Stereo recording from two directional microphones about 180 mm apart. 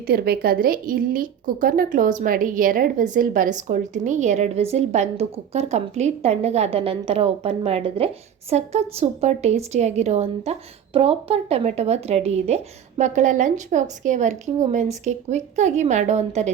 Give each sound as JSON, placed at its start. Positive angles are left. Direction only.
{"t": 0.1, "sound": "a woman's voice", "side_deg": -60}